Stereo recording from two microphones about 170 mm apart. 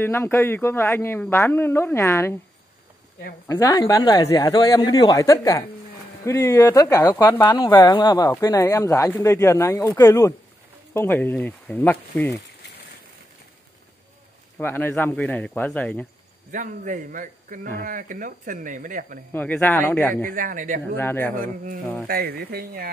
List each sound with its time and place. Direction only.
0.0 s speech: 15° left (ahead or behind)
3.4 s speech: 20° left (ahead or behind)
14.6 s speech: 10° left (ahead or behind)
16.5 s speech: 50° right (ahead or behind)
19.3 s speech: 10° left (ahead or behind)
20.2 s speech: 55° right (ahead or behind)
20.9 s speech: 10° left (ahead or behind)
22.0 s speech: 65° right (ahead or behind)